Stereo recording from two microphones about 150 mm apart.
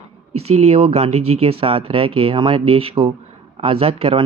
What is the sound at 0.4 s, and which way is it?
Speech, 45° right (ahead or behind).